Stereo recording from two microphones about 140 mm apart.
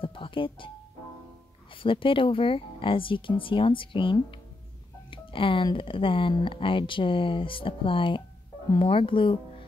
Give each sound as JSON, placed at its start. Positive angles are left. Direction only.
{"t": 0.0, "sound": "music", "side_deg": 40}
{"t": 1.8, "sound": "speech", "side_deg": 40}